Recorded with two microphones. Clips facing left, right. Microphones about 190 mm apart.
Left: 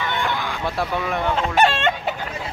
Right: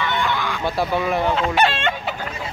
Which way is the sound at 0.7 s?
Centre (ahead or behind).